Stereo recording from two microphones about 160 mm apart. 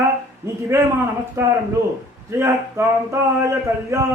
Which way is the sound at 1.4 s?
15° right (ahead or behind).